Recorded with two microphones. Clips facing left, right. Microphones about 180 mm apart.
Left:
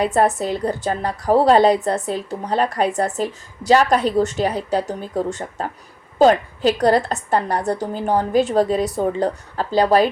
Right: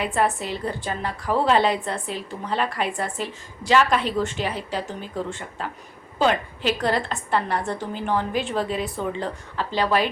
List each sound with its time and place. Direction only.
0.0 s a woman's voice: 40° left (ahead or behind)